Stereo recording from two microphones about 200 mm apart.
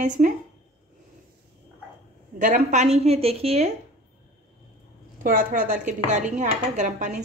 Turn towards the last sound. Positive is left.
turn(degrees=-35)  # may be behind; listen again after turning